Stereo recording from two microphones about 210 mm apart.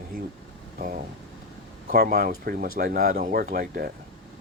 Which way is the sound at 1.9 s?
45° right (ahead or behind).